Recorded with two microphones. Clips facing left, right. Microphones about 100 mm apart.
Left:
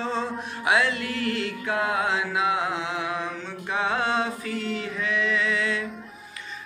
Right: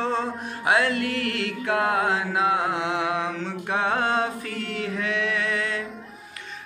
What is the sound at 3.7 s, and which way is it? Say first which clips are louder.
Music: right 1 dB; 50° right (ahead or behind).